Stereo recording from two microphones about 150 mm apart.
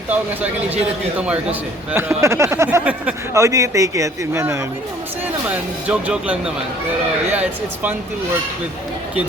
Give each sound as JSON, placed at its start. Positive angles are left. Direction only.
{"t": 0.1, "sound": "a man's voice", "side_deg": -10}
{"t": 3.3, "sound": "a man's voice", "side_deg": -20}